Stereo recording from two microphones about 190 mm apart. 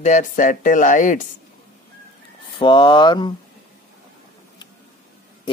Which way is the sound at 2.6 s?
25° left (ahead or behind).